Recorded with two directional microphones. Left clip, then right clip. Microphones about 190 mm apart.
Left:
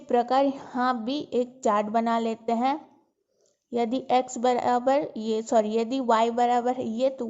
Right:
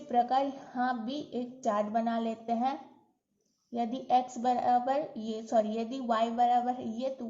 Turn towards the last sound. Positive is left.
turn(degrees=55)  # may be behind; listen again after turning